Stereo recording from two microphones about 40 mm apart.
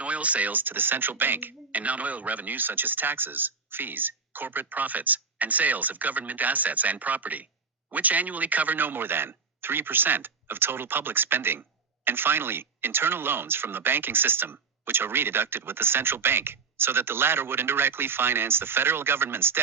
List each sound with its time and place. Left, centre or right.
0.0 s speech: right
1.7 s speech: right